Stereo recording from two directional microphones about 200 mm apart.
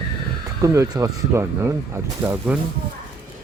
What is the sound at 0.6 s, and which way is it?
Speech, 15° right (ahead or behind).